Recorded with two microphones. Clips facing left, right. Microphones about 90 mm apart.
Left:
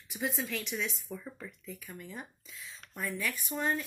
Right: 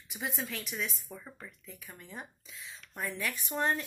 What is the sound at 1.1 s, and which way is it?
Speech, 25° right (ahead or behind).